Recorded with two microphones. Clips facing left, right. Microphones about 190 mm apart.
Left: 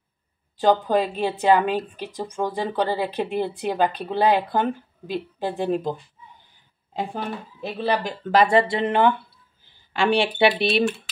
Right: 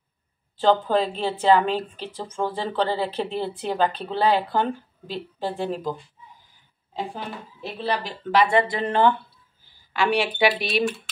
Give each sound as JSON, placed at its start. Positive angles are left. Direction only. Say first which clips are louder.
{"t": 0.6, "sound": "a woman's voice", "louder": "left 1 dB", "side_deg": 15}
{"t": 7.8, "sound": "speech", "louder": "left 3 dB", "side_deg": 45}
{"t": 8.6, "sound": "speech", "louder": "left 1 dB", "side_deg": 25}
{"t": 9.9, "sound": "speech", "louder": "left 2 dB", "side_deg": 30}